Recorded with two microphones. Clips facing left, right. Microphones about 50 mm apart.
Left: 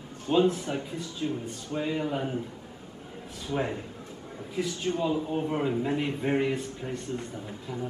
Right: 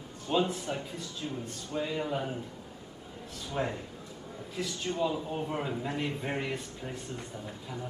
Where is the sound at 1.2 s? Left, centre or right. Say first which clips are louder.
Left 7 dB; centre.